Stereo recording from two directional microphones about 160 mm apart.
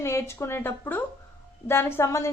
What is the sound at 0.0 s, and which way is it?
A woman's voice, 15° left (ahead or behind).